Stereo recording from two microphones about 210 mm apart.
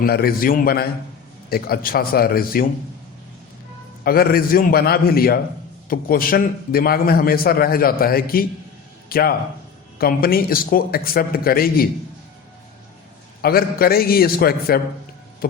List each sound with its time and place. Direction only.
0.0 s a man's voice: 45° left (ahead or behind)
4.0 s a man's voice: 45° left (ahead or behind)
13.4 s a man's voice: 45° left (ahead or behind)